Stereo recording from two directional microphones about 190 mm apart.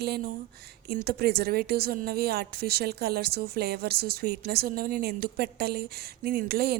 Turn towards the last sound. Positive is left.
turn(degrees=-55)  # may be behind; listen again after turning